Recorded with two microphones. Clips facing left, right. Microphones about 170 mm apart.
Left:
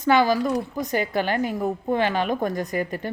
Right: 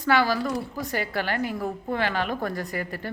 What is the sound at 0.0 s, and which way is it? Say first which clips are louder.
A woman's voice: left 4 dB; 20° left (ahead or behind).